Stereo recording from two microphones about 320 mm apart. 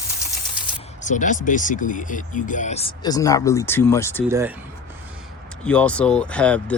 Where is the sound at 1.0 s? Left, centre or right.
Left.